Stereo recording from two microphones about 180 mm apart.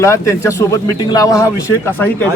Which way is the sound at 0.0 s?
15° left (ahead or behind).